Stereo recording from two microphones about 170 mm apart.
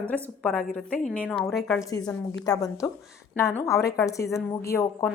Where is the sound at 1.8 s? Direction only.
20° left (ahead or behind).